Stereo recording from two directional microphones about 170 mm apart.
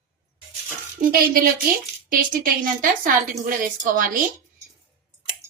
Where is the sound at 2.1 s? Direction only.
55° right (ahead or behind).